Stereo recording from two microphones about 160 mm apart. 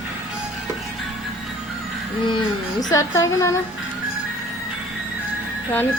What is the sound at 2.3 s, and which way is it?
Speech, 30° left (ahead or behind).